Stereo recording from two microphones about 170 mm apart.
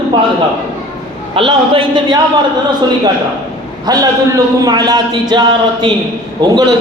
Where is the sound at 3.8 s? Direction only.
20° right (ahead or behind).